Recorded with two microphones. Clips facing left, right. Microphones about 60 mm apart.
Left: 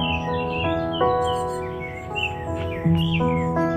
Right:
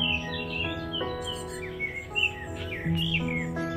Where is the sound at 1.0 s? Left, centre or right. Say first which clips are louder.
Left 15 dB; centre.